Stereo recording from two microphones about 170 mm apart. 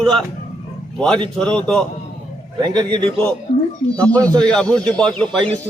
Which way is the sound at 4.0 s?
10° left (ahead or behind).